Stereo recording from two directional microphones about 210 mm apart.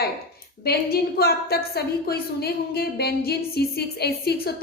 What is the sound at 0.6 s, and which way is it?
A woman's voice, 50° left (ahead or behind).